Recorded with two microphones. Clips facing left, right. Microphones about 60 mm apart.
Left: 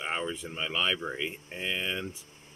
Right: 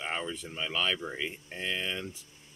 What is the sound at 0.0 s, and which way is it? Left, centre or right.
Speech, centre.